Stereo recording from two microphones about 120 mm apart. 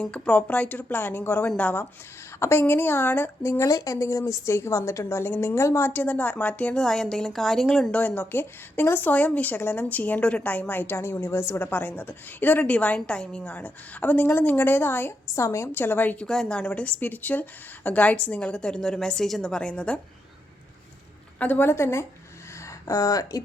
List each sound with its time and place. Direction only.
0.0 s speech: 10° left (ahead or behind)
21.3 s a woman's voice: 15° left (ahead or behind); by 23.4 s 30° left (ahead or behind)